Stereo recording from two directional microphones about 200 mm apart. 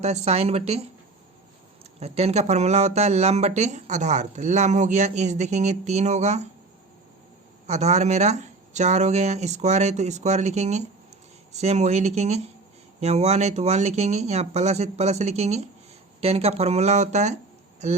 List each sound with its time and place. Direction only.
0.0 s speech: 35° right (ahead or behind)
2.0 s speech: 30° right (ahead or behind)
7.7 s speech: 35° right (ahead or behind)